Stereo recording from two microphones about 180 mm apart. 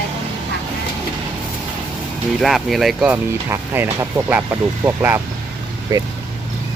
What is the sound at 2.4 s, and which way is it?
Speech, centre (ahead or behind).